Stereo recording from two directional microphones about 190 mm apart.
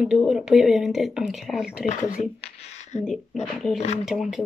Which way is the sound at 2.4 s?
35° left (ahead or behind).